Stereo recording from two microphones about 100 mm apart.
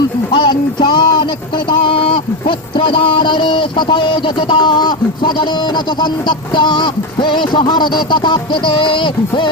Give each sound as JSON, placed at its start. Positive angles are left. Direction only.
{"t": 0.3, "sound": "speech", "side_deg": 50}